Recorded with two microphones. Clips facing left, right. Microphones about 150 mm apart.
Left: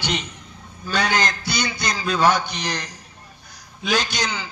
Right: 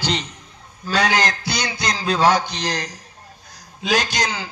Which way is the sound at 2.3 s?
90° right.